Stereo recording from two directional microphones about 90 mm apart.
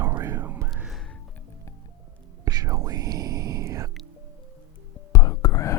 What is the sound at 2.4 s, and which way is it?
Whispering, 40° right (ahead or behind).